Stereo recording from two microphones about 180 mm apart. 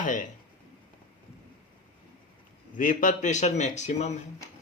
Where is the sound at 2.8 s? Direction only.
45° left (ahead or behind).